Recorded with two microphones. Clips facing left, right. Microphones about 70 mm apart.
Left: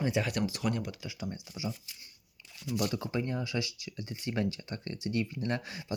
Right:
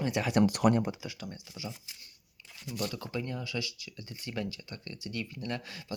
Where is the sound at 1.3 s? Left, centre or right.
Centre.